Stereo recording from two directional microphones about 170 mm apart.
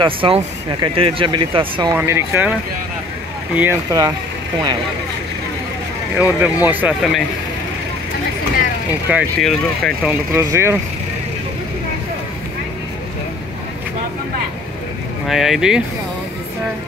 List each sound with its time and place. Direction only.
0.0 s speech: 30° right (ahead or behind)
2.0 s speech: 15° right (ahead or behind)
3.5 s speech: 15° right (ahead or behind)
6.1 s speech: 10° right (ahead or behind)
9.4 s speech: centre (ahead or behind)
10.3 s speech: 15° right (ahead or behind)
15.2 s speech: centre (ahead or behind)